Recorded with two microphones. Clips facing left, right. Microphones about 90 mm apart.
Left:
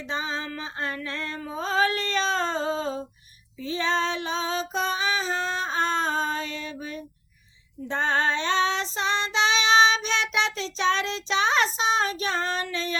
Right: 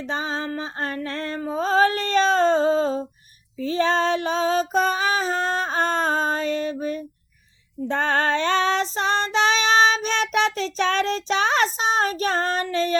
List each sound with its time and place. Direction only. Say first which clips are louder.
0.0 s music: right 4 dB; 45° right (ahead or behind)
3.6 s female singing: right 5 dB; 45° right (ahead or behind)